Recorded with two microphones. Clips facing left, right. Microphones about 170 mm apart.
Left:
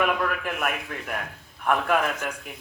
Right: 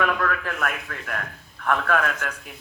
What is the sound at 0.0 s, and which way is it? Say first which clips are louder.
Speech: even; 15° left (ahead or behind).